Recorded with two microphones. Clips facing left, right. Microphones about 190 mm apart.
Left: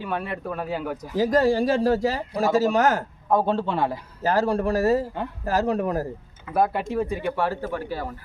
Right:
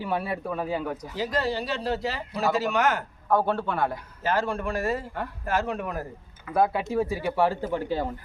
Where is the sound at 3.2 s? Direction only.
25° left (ahead or behind).